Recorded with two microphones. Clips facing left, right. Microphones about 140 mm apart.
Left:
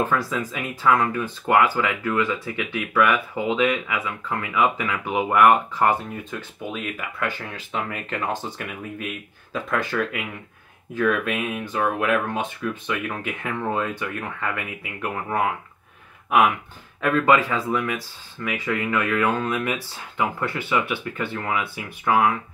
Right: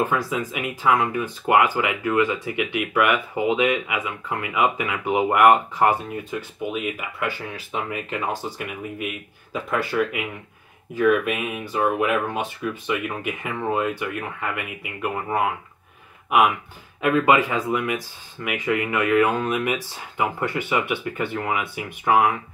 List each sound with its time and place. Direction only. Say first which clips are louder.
0.0 s speech: even; 15° right (ahead or behind)
17.0 s speech: right 1 dB; 15° right (ahead or behind)